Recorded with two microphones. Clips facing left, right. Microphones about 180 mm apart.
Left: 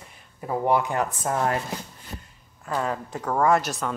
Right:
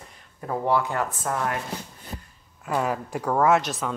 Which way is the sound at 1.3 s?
30° left (ahead or behind).